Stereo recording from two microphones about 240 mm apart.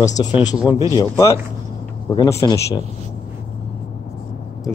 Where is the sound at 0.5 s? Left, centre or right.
Centre.